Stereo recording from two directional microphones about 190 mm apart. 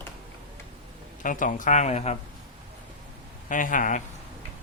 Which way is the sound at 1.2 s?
45° left (ahead or behind).